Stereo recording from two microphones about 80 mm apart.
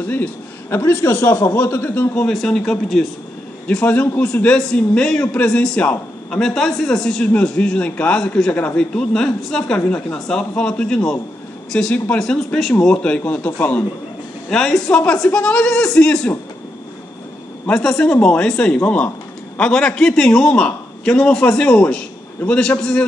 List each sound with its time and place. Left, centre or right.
0.0 s a man's voice: centre
0.7 s a man's voice: left
2.3 s a man's voice: centre; by 13.8 s left
14.5 s a man's voice: centre
17.6 s a man's voice: centre